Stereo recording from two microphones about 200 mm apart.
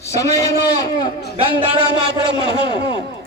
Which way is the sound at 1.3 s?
25° right (ahead or behind).